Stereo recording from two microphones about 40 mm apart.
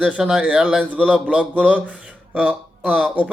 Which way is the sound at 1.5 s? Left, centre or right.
Right.